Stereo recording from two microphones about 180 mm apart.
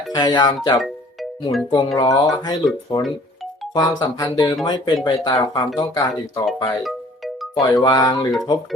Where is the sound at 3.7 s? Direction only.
20° left (ahead or behind).